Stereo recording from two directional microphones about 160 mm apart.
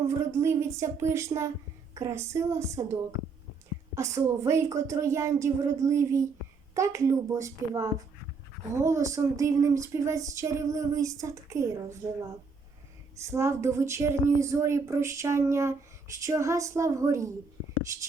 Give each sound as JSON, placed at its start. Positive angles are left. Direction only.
{"t": 0.1, "sound": "speech", "side_deg": -20}
{"t": 13.1, "sound": "speech", "side_deg": -20}